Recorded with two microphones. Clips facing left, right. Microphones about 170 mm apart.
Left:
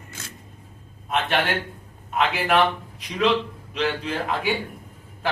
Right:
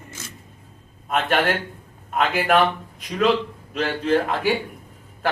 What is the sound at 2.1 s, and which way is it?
Speech, 45° right (ahead or behind).